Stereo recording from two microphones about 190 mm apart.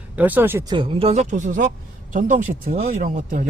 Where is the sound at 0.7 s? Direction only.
25° right (ahead or behind).